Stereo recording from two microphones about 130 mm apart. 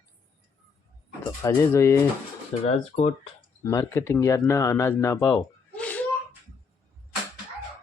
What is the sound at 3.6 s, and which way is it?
Speech, 20° left (ahead or behind).